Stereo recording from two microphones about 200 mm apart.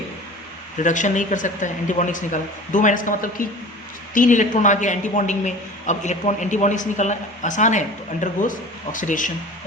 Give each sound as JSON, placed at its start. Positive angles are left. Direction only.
{"t": 0.8, "sound": "a man's voice", "side_deg": 40}